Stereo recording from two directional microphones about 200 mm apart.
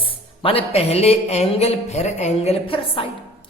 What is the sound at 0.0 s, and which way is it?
Speech, 25° left (ahead or behind).